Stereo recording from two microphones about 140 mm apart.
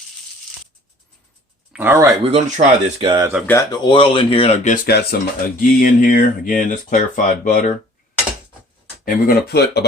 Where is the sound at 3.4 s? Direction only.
15° left (ahead or behind).